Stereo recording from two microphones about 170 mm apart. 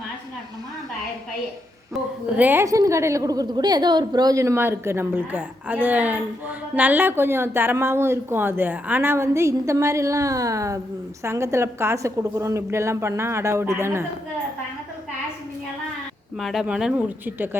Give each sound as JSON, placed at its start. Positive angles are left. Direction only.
{"t": 2.4, "sound": "a woman's voice", "side_deg": -15}
{"t": 16.4, "sound": "speech", "side_deg": 0}